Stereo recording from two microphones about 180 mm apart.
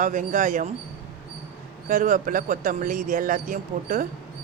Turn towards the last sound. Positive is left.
turn(degrees=-45)  # may be behind; listen again after turning